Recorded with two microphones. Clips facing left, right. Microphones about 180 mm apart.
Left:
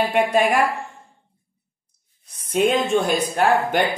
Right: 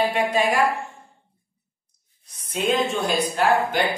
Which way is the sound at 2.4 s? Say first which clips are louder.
Left 4 dB; 55° left (ahead or behind).